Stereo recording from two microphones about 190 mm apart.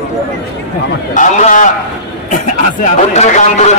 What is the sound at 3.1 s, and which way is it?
Speech, 35° left (ahead or behind).